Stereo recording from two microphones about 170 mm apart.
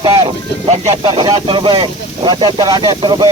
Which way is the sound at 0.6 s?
25° right (ahead or behind).